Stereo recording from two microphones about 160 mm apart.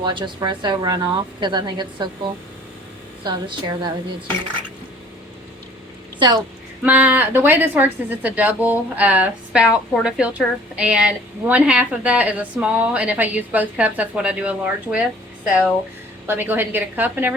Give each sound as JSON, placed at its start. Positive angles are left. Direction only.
{"t": 0.0, "sound": "a woman's voice", "side_deg": -30}
{"t": 3.2, "sound": "a woman's voice", "side_deg": -30}
{"t": 6.1, "sound": "a woman's voice", "side_deg": -30}
{"t": 6.8, "sound": "speech", "side_deg": -10}
{"t": 16.2, "sound": "speech", "side_deg": -10}